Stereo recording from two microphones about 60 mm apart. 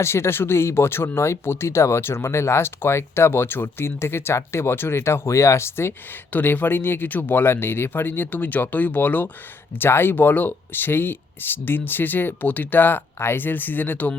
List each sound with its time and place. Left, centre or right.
0.0 s speech: left
6.3 s speech: left